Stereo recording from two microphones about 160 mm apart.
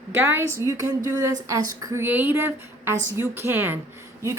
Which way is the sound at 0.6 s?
20° right (ahead or behind).